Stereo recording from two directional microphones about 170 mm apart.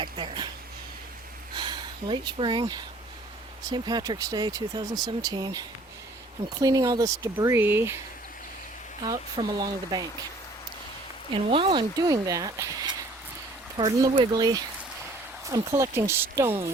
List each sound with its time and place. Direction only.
0.0 s speech: 30° right (ahead or behind)
1.5 s speech: 25° right (ahead or behind)
9.0 s speech: 25° right (ahead or behind)
11.3 s speech: 30° right (ahead or behind)